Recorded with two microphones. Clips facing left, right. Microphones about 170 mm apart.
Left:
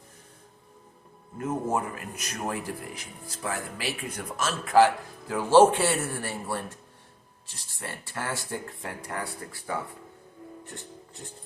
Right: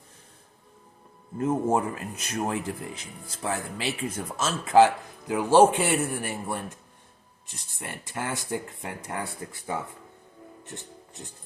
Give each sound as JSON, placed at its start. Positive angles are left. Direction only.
{"t": 1.4, "sound": "a man's voice", "side_deg": -30}